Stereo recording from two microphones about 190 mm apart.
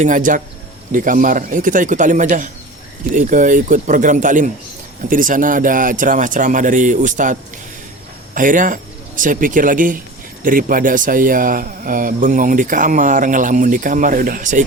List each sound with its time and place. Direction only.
0.0 s speech: 45° right (ahead or behind)
8.4 s speech: 45° right (ahead or behind)